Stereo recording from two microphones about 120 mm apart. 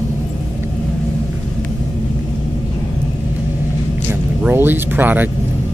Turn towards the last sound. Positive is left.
turn(degrees=-15)  # may be behind; listen again after turning